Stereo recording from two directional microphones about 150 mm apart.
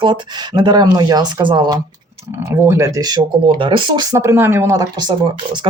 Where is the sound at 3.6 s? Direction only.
35° right (ahead or behind).